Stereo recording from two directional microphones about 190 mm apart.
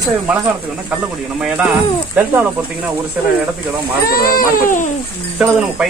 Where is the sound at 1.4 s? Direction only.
5° right (ahead or behind).